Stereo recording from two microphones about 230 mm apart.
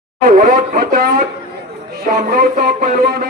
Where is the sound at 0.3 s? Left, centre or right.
Right.